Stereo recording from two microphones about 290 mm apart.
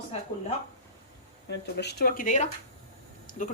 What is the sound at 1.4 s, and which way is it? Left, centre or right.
Speech, left.